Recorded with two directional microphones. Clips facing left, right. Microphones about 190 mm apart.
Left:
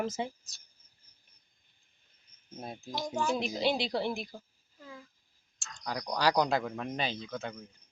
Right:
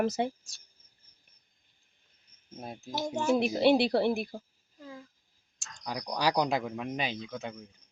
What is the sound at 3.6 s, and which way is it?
Speech, 60° right (ahead or behind).